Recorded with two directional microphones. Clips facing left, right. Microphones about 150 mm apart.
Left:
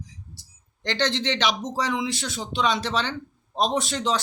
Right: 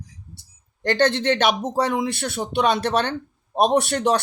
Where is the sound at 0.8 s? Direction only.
55° right (ahead or behind).